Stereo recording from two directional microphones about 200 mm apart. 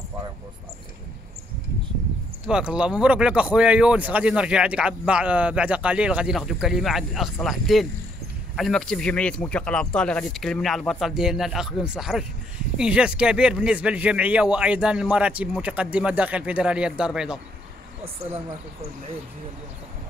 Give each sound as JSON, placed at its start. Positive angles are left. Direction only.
{"t": 2.4, "sound": "speech", "side_deg": -5}
{"t": 18.2, "sound": "speech", "side_deg": -30}